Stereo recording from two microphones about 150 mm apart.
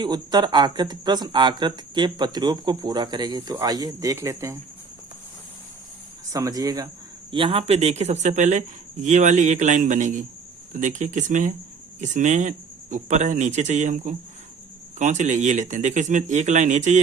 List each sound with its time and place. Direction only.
0.0 s speech: 30° right (ahead or behind)
6.3 s speech: 25° right (ahead or behind); by 17.0 s 55° right (ahead or behind)